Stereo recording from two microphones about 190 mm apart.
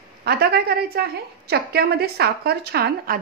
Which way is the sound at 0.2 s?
55° right (ahead or behind).